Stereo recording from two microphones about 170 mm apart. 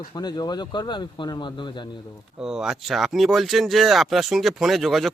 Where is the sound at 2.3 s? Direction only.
5° right (ahead or behind).